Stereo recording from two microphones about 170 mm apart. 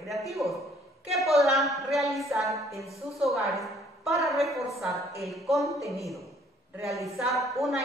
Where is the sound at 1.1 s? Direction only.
Centre (ahead or behind).